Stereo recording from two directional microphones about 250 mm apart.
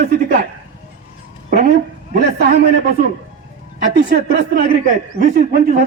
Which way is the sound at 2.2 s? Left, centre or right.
Right.